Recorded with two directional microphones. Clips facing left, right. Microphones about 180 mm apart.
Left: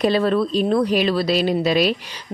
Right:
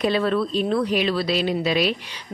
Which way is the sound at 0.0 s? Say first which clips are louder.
Left 3 dB; 40° left (ahead or behind).